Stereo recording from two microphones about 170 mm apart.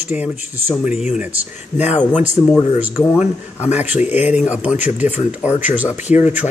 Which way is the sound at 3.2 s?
40° left (ahead or behind).